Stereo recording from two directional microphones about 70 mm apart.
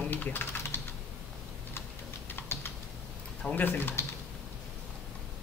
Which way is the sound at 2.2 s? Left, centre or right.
Left.